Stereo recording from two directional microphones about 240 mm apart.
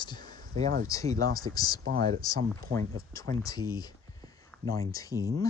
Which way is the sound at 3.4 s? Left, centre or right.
Centre.